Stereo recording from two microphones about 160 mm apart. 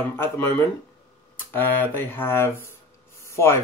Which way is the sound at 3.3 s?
15° left (ahead or behind).